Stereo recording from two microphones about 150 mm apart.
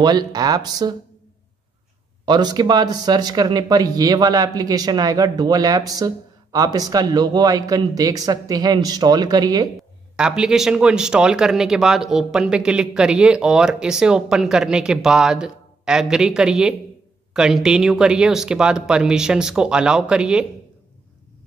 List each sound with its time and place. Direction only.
0.0 s speech: 25° right (ahead or behind)
2.2 s speech: 30° right (ahead or behind)
10.1 s speech: 5° right (ahead or behind)